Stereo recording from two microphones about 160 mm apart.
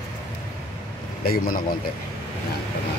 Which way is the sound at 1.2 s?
70° left (ahead or behind).